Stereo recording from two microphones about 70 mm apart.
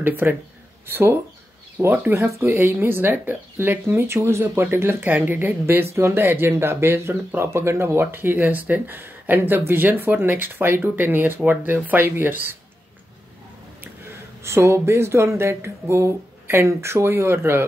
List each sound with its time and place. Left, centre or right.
0.0 s speech: right
2.1 s speech: right
14.0 s speech: right